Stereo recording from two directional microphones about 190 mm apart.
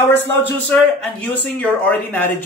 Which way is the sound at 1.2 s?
10° left (ahead or behind).